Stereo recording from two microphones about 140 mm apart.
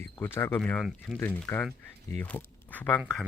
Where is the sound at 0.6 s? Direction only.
Centre (ahead or behind).